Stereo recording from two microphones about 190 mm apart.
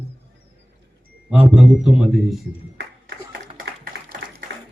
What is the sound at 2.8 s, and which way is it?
Music, 60° right (ahead or behind).